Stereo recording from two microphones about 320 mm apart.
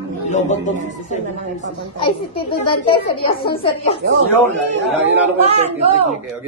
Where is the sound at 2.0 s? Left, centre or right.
Centre.